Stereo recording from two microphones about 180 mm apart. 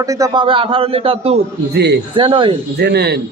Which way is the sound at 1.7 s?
70° right (ahead or behind).